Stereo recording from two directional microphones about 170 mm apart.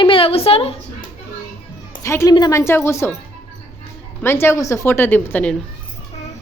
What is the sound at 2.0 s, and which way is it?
A woman's voice, 15° left (ahead or behind).